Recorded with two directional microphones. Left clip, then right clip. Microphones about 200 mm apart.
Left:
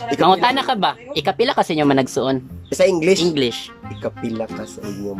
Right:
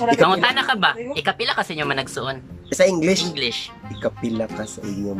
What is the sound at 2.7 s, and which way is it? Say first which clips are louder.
Speech: left 2 dB; 5° left (ahead or behind).